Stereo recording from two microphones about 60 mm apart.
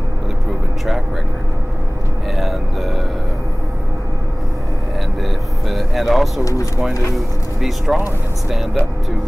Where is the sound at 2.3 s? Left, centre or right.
Centre.